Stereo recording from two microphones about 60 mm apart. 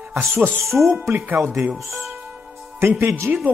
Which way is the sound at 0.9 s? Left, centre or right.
Right.